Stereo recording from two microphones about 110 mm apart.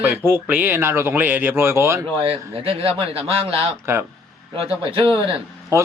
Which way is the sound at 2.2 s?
55° right (ahead or behind).